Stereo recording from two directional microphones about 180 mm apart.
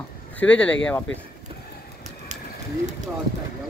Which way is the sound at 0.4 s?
5° left (ahead or behind).